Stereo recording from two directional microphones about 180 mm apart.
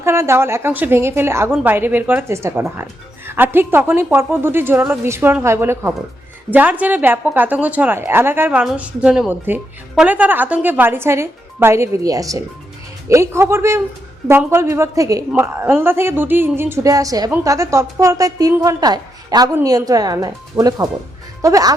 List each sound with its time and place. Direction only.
0.0 s speech: 15° right (ahead or behind)